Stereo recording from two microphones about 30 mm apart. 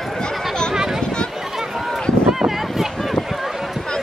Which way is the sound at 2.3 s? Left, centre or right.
Centre.